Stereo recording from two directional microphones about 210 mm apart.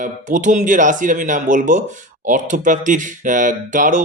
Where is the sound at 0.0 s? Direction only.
40° right (ahead or behind).